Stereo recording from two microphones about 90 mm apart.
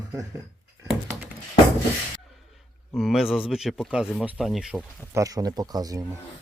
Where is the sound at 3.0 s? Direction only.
5° right (ahead or behind).